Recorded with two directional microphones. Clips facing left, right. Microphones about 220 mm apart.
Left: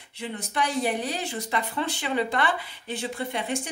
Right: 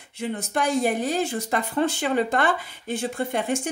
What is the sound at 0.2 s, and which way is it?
A woman's voice, 45° right (ahead or behind).